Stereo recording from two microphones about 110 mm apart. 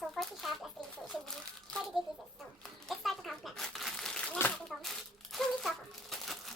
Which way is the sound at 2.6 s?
5° left (ahead or behind).